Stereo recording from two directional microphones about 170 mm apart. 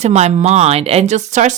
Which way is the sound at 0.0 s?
40° right (ahead or behind).